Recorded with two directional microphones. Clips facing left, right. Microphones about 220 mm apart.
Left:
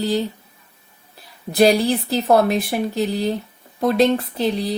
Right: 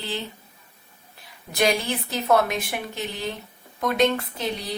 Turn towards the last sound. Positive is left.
turn(degrees=35)  # may be behind; listen again after turning